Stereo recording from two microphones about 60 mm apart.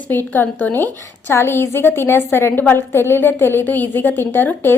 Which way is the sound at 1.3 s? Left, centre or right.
Left.